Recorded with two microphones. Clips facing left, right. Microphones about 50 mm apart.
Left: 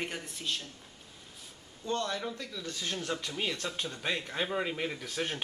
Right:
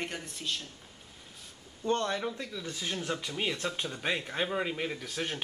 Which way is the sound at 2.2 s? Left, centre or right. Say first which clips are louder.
Right 2 dB; centre.